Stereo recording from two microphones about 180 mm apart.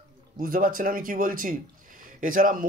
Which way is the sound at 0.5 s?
50° right (ahead or behind).